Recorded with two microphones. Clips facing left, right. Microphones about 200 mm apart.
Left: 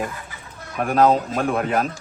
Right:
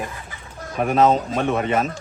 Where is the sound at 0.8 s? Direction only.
Centre (ahead or behind).